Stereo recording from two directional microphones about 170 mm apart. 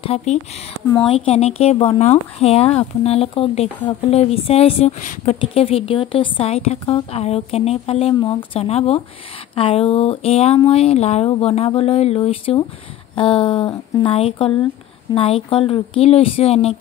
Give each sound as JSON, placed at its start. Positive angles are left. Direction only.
{"t": 0.0, "sound": "a woman's voice", "side_deg": 40}
{"t": 5.4, "sound": "a woman's voice", "side_deg": 35}